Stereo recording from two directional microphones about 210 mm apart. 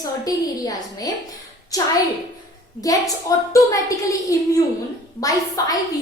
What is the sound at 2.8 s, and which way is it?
A woman's voice, 15° left (ahead or behind).